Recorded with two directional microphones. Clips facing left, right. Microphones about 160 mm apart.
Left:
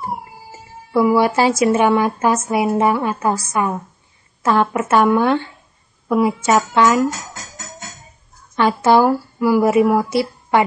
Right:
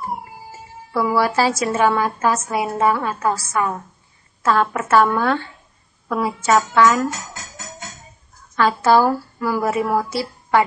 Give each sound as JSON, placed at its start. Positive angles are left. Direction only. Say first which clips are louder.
{"t": 1.1, "sound": "speech", "louder": "left 3 dB", "side_deg": 20}
{"t": 8.5, "sound": "speech", "louder": "left 2 dB", "side_deg": 15}